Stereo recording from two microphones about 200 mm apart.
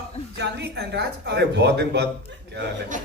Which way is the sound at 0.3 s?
60° right (ahead or behind).